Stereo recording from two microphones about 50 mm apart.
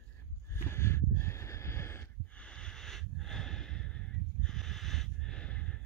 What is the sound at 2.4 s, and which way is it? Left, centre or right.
Snort, centre.